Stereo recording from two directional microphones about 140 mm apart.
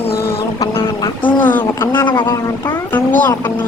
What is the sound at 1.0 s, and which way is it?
Vehicle, 35° left (ahead or behind).